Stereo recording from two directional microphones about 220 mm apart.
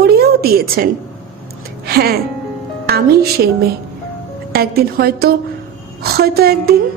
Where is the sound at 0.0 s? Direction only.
45° right (ahead or behind).